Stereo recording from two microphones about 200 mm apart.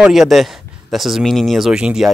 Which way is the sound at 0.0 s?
Centre (ahead or behind).